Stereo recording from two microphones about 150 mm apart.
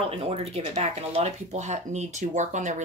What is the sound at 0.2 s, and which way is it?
Speech, 40° right (ahead or behind).